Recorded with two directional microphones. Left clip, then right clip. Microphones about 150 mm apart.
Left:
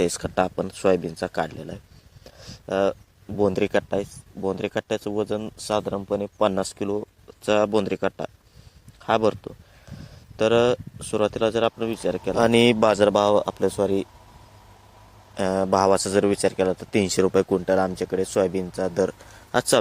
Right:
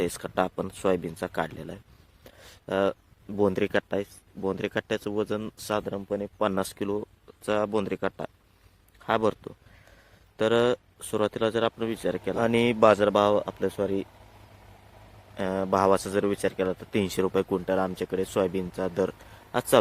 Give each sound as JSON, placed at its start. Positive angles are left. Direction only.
{"t": 0.0, "sound": "speech", "side_deg": 20}
{"t": 2.2, "sound": "a sound", "side_deg": 0}
{"t": 3.6, "sound": "speech", "side_deg": 5}
{"t": 5.8, "sound": "speech", "side_deg": 15}
{"t": 6.5, "sound": "speech", "side_deg": 0}
{"t": 7.4, "sound": "speech", "side_deg": 25}
{"t": 12.4, "sound": "speech", "side_deg": 30}
{"t": 15.4, "sound": "speech", "side_deg": 20}
{"t": 19.5, "sound": "speech", "side_deg": 30}